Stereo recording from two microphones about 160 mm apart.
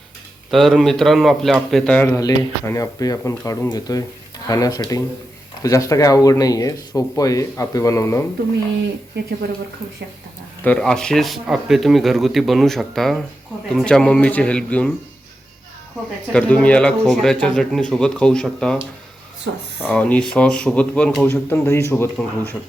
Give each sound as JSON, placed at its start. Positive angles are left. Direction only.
{"t": 0.5, "sound": "speech", "side_deg": 0}
{"t": 2.0, "sound": "speech", "side_deg": 20}
{"t": 10.6, "sound": "speech", "side_deg": 5}
{"t": 16.3, "sound": "speech", "side_deg": 5}
{"t": 19.5, "sound": "speech", "side_deg": -90}
{"t": 19.8, "sound": "speech", "side_deg": 10}